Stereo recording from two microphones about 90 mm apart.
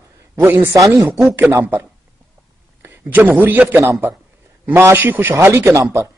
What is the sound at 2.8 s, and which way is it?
A man's voice, 20° right (ahead or behind).